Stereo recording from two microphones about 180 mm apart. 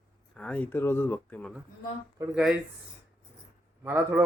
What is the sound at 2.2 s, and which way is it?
Speech, 20° right (ahead or behind).